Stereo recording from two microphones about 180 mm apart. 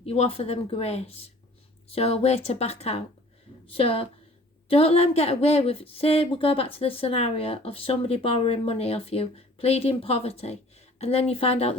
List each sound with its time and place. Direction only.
0.0 s a woman's voice: 35° left (ahead or behind)